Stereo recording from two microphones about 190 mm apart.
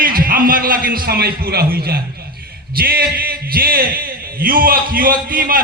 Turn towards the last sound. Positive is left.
turn(degrees=-50)  # may be behind; listen again after turning